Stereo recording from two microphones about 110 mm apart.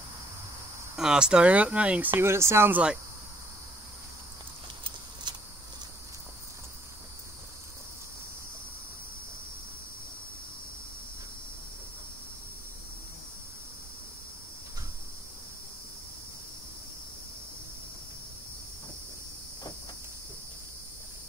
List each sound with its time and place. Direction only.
0.9 s speech: 5° right (ahead or behind)
2.1 s speech: 25° right (ahead or behind)
5.3 s a sound: 40° right (ahead or behind)